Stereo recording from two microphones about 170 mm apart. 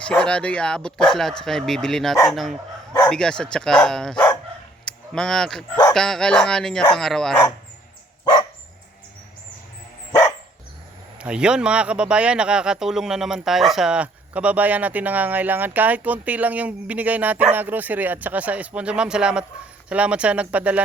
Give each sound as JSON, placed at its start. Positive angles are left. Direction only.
{"t": 0.1, "sound": "speech", "side_deg": 5}
{"t": 8.2, "sound": "dog", "side_deg": 25}
{"t": 10.1, "sound": "dog", "side_deg": 15}
{"t": 11.2, "sound": "speech", "side_deg": -5}